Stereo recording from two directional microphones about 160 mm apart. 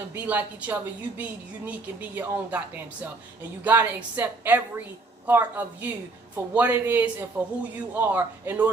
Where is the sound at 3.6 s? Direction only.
10° right (ahead or behind).